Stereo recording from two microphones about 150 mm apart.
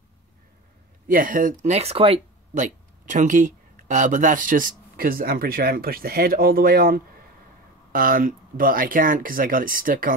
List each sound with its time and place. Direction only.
1.0 s speech: 65° right (ahead or behind)